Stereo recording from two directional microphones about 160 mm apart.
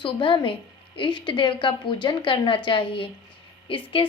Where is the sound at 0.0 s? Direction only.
30° left (ahead or behind).